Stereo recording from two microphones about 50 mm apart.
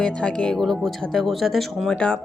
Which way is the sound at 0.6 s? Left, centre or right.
Centre.